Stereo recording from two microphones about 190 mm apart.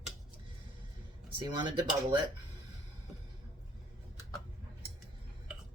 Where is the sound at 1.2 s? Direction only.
25° right (ahead or behind).